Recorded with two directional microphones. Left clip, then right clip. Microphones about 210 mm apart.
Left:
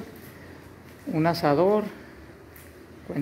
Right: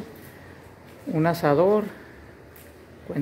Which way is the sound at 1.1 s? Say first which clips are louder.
Right 1 dB; 10° right (ahead or behind).